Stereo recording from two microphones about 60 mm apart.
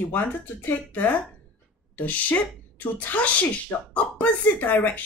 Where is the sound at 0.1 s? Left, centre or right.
Left.